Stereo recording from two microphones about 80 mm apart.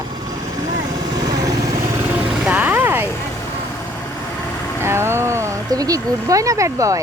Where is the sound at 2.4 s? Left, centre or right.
Centre.